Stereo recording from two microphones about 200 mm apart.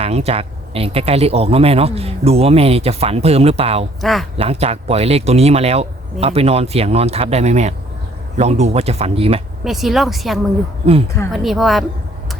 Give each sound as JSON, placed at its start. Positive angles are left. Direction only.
{"t": 0.0, "sound": "speech", "side_deg": -30}
{"t": 4.0, "sound": "a woman's voice", "side_deg": 0}
{"t": 4.4, "sound": "speech", "side_deg": -30}
{"t": 9.6, "sound": "a woman's voice", "side_deg": 0}
{"t": 10.8, "sound": "speech", "side_deg": -30}
{"t": 11.3, "sound": "a woman's voice", "side_deg": 0}